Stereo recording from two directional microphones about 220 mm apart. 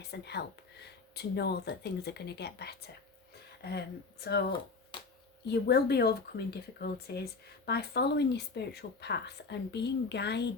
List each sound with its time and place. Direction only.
0.0 s speech: 50° left (ahead or behind)
5.5 s speech: 45° left (ahead or behind)